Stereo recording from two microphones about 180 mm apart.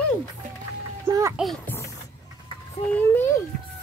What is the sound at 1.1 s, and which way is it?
Speech, 15° right (ahead or behind).